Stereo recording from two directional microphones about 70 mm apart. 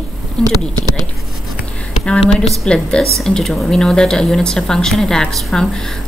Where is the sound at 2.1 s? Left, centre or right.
Centre.